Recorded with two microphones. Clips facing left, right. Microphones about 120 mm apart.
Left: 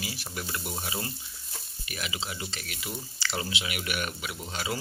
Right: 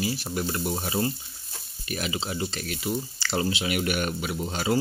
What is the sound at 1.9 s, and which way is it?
Speech, 40° right (ahead or behind).